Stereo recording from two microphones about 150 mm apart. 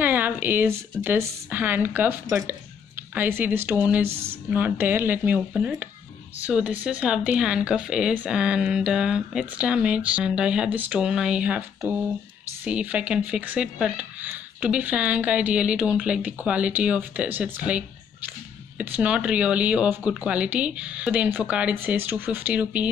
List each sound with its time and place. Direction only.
0.0 s a sound: 10° right (ahead or behind)
1.0 s speech: 15° right (ahead or behind)
4.1 s speech: 40° right (ahead or behind)
4.5 s speech: 10° right (ahead or behind)
12.6 s speech: 10° right (ahead or behind)